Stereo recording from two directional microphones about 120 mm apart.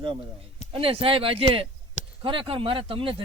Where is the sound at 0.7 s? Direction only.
50° right (ahead or behind).